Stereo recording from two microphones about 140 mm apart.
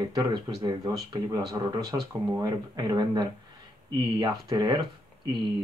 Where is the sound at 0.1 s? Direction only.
30° right (ahead or behind).